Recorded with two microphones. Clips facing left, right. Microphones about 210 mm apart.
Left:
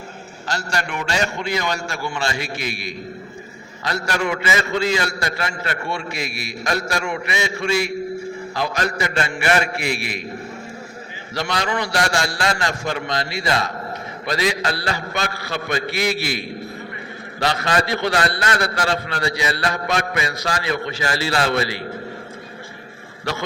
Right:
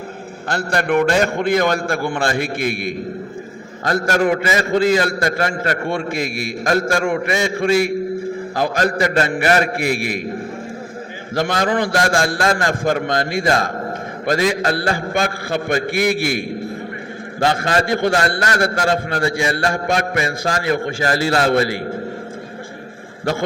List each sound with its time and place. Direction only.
0.4 s a man's voice: 55° right (ahead or behind)
11.3 s a man's voice: 50° right (ahead or behind)